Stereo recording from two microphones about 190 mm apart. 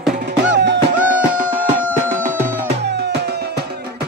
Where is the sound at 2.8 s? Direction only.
60° right (ahead or behind).